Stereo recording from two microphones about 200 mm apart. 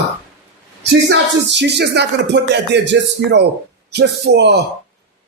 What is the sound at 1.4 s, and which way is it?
Music, 60° right (ahead or behind).